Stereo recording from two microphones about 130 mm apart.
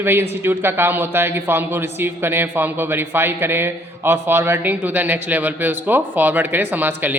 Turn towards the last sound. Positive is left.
turn(degrees=-15)  # may be behind; listen again after turning